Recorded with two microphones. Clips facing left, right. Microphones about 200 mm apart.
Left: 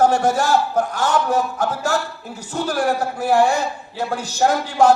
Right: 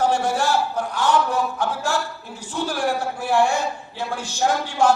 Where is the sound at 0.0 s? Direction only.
45° left (ahead or behind).